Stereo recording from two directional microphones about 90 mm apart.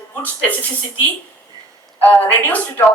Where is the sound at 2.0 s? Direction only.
20° left (ahead or behind).